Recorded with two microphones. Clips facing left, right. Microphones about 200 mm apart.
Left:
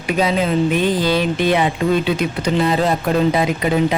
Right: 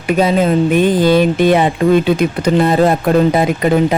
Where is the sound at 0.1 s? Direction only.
50° right (ahead or behind).